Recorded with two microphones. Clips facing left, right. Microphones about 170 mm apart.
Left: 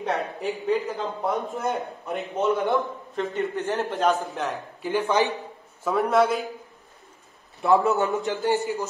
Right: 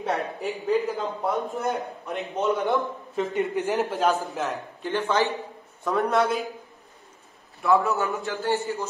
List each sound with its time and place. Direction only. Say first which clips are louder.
0.0 s a man's voice: left 1 dB; centre (ahead or behind)
3.3 s speech: right 2 dB; 15° right (ahead or behind)
3.7 s a man's voice: left 1 dB; centre (ahead or behind)
4.9 s a man's voice: left 1 dB; 15° left (ahead or behind)
5.9 s a man's voice: left 2 dB; centre (ahead or behind)
7.6 s a man's voice: left 2 dB; 25° left (ahead or behind)